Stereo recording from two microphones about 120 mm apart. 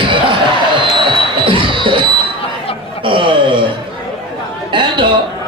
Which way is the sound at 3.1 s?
45° right (ahead or behind).